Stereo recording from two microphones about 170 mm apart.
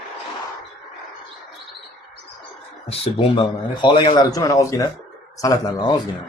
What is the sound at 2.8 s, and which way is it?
A man's voice, 35° left (ahead or behind).